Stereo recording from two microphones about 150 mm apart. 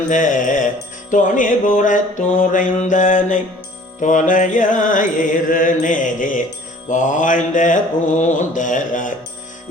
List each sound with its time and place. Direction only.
0.1 s speech: 60° left (ahead or behind)
1.1 s mantra: 60° left (ahead or behind)